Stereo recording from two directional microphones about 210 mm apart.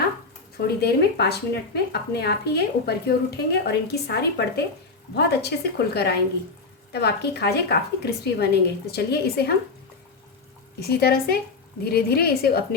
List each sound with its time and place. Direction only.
0.5 s speech: 50° left (ahead or behind)
10.8 s speech: 50° left (ahead or behind)